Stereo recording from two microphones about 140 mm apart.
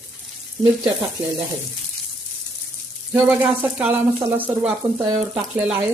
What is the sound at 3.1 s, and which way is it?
Speech, 15° right (ahead or behind).